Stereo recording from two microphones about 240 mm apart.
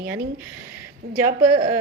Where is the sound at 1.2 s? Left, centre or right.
Right.